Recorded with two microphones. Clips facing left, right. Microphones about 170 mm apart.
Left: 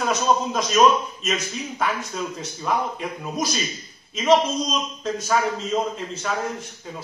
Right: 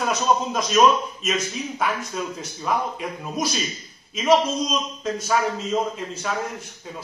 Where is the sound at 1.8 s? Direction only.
Centre (ahead or behind).